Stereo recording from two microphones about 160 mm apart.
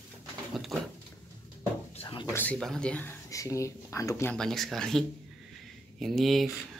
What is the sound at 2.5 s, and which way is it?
Speech, 5° left (ahead or behind).